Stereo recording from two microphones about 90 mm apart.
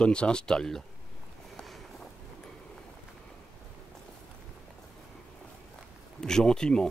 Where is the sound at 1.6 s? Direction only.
Centre (ahead or behind).